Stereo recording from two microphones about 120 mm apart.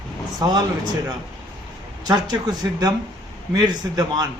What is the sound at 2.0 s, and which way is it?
Speech, 35° right (ahead or behind).